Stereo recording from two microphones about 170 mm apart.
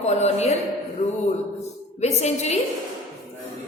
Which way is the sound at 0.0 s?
40° left (ahead or behind).